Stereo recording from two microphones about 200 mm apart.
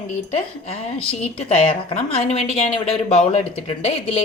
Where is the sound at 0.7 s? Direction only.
30° left (ahead or behind).